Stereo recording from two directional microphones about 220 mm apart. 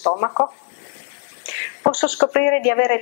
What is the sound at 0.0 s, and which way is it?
Speech, 30° left (ahead or behind).